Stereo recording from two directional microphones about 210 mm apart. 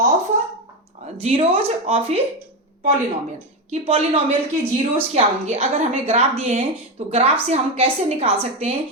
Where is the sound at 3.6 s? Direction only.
30° right (ahead or behind).